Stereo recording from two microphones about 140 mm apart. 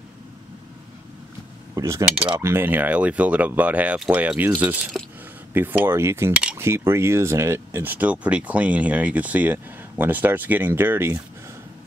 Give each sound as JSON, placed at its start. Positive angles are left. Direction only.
{"t": 1.8, "sound": "speech", "side_deg": -25}